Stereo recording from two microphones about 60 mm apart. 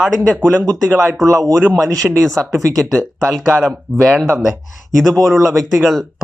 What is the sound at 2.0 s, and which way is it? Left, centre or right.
Speech, centre.